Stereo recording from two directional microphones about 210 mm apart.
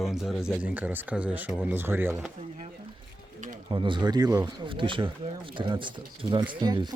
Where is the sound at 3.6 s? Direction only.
25° right (ahead or behind).